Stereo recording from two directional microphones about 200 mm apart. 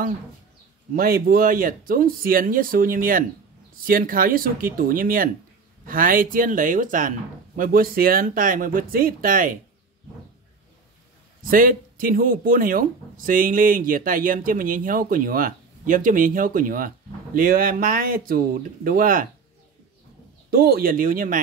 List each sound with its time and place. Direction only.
0.9 s speech: 45° right (ahead or behind)
11.4 s speech: 45° right (ahead or behind)
20.5 s speech: 50° right (ahead or behind)